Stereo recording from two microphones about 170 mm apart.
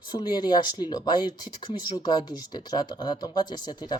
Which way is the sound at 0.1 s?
25° left (ahead or behind).